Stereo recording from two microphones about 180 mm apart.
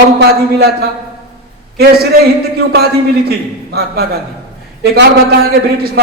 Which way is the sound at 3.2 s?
60° right (ahead or behind).